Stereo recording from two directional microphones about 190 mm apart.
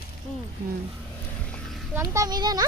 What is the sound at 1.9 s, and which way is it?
Speech, 15° right (ahead or behind).